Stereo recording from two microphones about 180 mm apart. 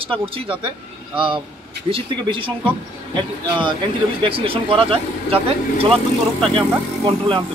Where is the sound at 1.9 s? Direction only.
25° right (ahead or behind).